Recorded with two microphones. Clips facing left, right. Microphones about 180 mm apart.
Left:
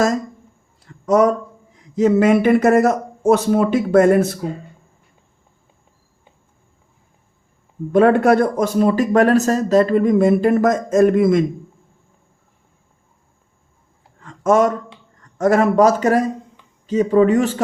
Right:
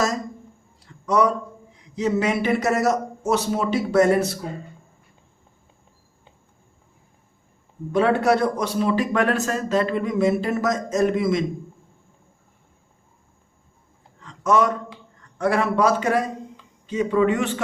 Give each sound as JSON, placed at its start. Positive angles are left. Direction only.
{"t": 0.9, "sound": "speech", "side_deg": 45}
{"t": 7.9, "sound": "a man's voice", "side_deg": 50}
{"t": 14.2, "sound": "a sound", "side_deg": 50}
{"t": 15.4, "sound": "a man's voice", "side_deg": 45}